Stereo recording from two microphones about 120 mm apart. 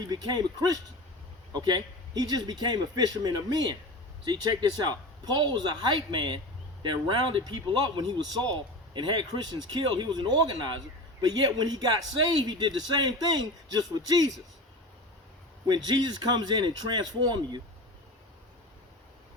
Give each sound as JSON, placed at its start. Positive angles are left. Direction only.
{"t": 0.0, "sound": "speech", "side_deg": -35}
{"t": 4.9, "sound": "speech", "side_deg": -35}
{"t": 15.6, "sound": "speech", "side_deg": -35}